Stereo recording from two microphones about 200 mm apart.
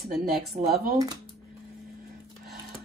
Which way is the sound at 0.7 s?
50° right (ahead or behind).